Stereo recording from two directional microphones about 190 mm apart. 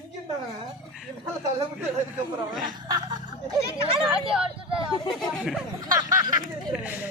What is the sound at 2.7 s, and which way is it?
Speech, 20° right (ahead or behind).